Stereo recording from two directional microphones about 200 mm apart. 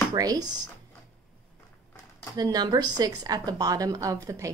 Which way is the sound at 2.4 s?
20° right (ahead or behind).